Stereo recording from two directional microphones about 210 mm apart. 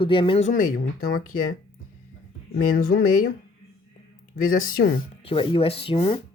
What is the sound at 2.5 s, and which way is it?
Speech, 40° left (ahead or behind).